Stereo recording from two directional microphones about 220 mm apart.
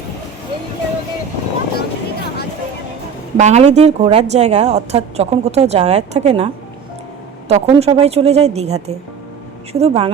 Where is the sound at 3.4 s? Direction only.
30° right (ahead or behind).